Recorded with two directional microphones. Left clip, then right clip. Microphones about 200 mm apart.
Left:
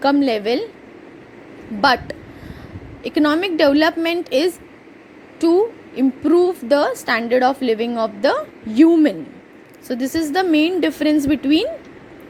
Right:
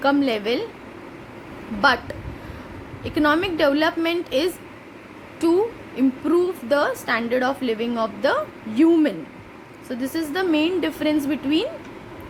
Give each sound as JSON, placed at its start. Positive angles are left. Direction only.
{"t": 0.0, "sound": "a woman's voice", "side_deg": 25}
{"t": 1.8, "sound": "a woman's voice", "side_deg": 25}
{"t": 9.9, "sound": "a woman's voice", "side_deg": 30}